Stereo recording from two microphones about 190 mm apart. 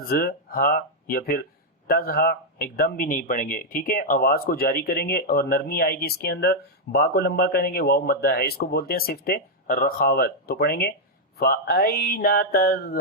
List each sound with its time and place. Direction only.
0.1 s speech: 50° left (ahead or behind)